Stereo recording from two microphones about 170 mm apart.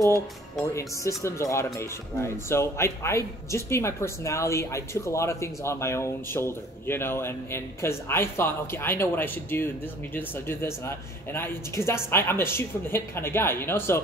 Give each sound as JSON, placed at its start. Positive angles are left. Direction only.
{"t": 0.7, "sound": "speech", "side_deg": 20}